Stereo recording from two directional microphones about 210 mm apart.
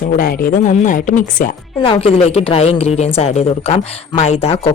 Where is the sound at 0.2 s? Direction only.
45° left (ahead or behind).